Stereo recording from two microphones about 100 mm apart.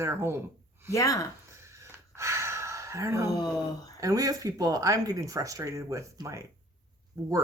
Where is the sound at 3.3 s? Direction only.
40° left (ahead or behind).